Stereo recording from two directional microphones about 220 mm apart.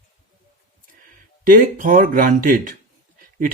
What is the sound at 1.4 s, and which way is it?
Speech, 40° right (ahead or behind).